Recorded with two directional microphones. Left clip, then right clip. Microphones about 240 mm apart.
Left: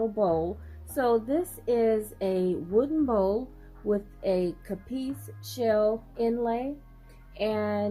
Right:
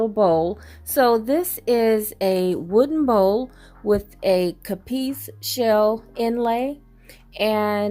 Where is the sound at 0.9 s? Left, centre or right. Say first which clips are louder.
Right 8 dB; right.